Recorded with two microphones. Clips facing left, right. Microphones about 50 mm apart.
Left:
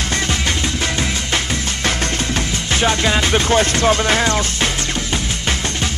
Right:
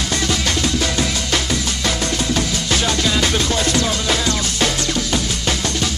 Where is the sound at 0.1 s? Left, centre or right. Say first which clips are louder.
Right 1 dB; left.